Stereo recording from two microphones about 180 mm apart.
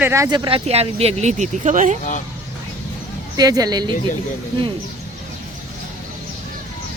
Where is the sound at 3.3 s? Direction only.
20° right (ahead or behind).